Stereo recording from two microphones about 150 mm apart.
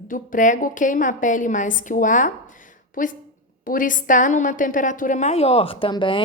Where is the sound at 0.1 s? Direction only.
60° left (ahead or behind).